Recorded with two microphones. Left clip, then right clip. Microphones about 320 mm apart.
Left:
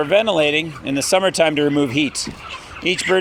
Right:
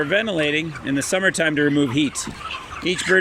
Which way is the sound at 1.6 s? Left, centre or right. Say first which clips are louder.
Left 1 dB; left.